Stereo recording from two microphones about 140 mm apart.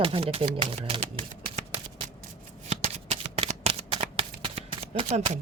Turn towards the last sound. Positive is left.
turn(degrees=-55)  # may be behind; listen again after turning